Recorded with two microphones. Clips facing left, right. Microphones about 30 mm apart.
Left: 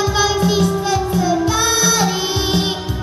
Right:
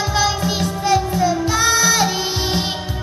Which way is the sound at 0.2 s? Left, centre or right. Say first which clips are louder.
Left 5 dB; centre.